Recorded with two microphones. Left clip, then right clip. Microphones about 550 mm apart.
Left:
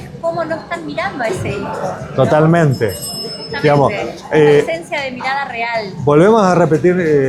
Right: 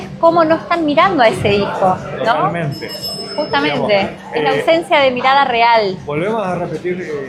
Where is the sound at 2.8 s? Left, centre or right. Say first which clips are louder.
Left 8 dB; left.